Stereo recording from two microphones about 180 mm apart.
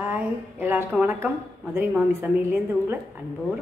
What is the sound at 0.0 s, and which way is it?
A woman's voice, 10° right (ahead or behind).